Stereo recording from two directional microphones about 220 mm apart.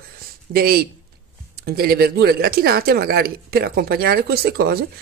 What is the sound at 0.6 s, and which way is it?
Speech, 45° right (ahead or behind).